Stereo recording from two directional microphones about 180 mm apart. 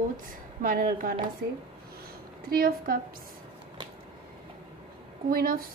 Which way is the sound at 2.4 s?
55° right (ahead or behind).